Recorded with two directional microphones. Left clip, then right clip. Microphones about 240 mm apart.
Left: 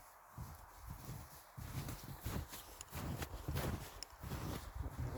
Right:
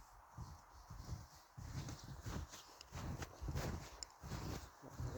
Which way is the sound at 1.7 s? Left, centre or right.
Left.